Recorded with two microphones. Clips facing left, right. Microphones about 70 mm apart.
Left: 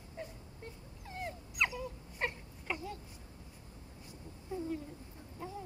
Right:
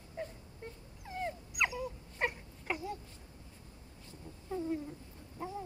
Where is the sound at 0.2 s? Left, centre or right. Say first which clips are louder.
Right 4 dB; right.